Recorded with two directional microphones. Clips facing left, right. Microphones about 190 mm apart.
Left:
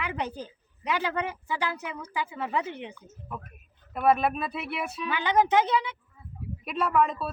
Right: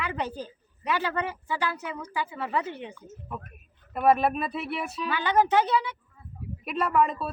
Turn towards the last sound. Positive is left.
turn(degrees=0)  # may be behind; listen again after turning